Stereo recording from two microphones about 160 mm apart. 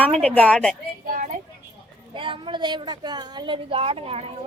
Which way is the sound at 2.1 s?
30° right (ahead or behind).